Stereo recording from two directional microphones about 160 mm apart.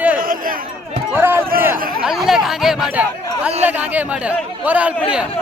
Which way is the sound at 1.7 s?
65° right (ahead or behind).